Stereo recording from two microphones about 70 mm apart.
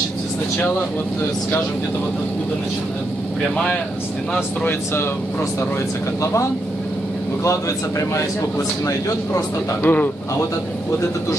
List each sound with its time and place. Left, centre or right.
9.9 s speech: left